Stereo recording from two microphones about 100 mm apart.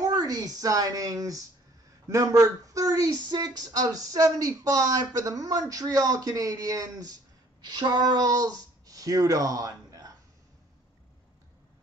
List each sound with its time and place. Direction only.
0.0 s speech: 40° right (ahead or behind)